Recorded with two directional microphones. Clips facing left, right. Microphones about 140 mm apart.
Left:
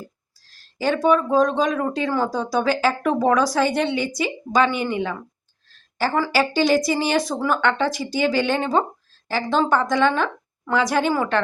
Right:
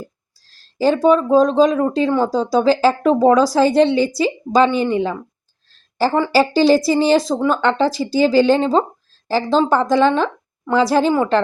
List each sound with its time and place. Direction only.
0.8 s speech: 30° right (ahead or behind)
6.1 s speech: 25° right (ahead or behind)